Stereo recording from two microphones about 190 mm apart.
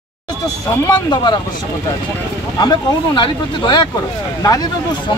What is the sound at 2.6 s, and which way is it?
Speech, 25° left (ahead or behind).